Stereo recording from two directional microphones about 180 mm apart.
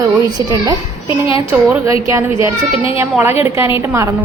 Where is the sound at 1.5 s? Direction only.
10° right (ahead or behind).